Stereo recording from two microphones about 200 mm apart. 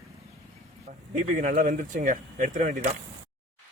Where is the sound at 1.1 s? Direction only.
40° right (ahead or behind).